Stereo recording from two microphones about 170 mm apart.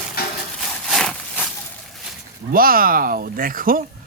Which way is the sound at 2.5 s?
60° right (ahead or behind).